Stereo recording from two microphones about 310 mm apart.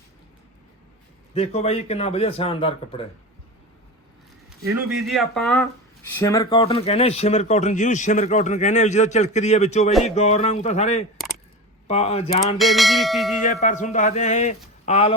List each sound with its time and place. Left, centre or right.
1.3 s speech: centre
4.4 s speech: centre
12.5 s church bell: centre
13.4 s speech: left